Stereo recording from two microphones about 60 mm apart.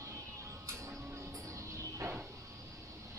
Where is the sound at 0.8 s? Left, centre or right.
Right.